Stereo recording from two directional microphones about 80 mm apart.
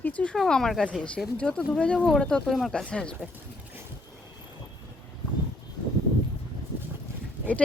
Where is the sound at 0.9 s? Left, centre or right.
Centre.